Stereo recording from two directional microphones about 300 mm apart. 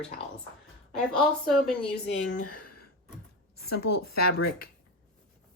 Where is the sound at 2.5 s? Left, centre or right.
Left.